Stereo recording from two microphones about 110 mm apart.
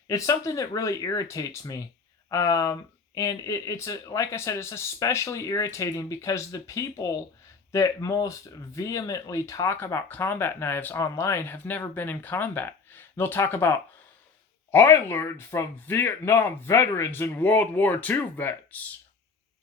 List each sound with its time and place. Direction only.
0.1 s speech: 30° left (ahead or behind)
9.7 s speech: 20° left (ahead or behind)